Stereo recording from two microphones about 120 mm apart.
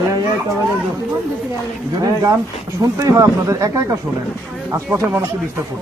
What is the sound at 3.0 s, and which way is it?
Speech, 30° right (ahead or behind).